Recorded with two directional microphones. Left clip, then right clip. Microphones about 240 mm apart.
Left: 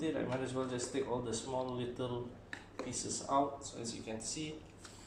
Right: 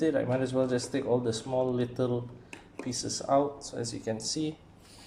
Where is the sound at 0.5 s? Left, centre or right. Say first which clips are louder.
Right 9 dB; right.